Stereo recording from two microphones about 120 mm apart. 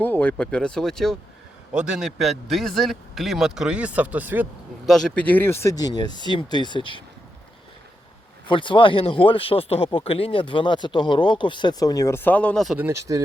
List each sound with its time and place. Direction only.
0.0 s a man's voice: 10° left (ahead or behind); by 4.4 s 15° right (ahead or behind)
4.9 s speech: 5° left (ahead or behind); by 7.0 s 45° left (ahead or behind)
8.4 s speech: 45° left (ahead or behind); by 12.6 s 10° left (ahead or behind)
12.6 s speech: 10° right (ahead or behind)
12.9 s speech: 25° right (ahead or behind)